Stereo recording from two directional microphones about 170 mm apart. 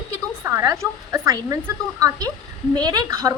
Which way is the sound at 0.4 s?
15° right (ahead or behind).